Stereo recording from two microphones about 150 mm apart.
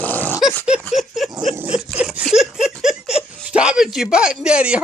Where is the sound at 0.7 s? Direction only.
Centre (ahead or behind).